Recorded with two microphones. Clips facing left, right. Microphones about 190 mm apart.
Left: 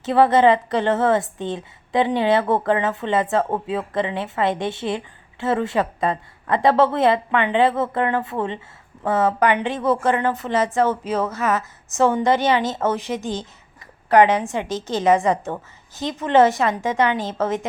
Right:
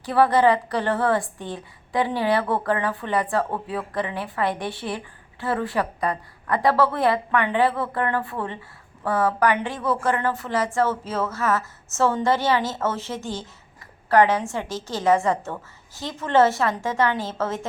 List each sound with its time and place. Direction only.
0.0 s a woman's voice: 20° left (ahead or behind)